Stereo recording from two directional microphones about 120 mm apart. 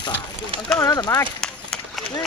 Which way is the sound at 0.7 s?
30° left (ahead or behind).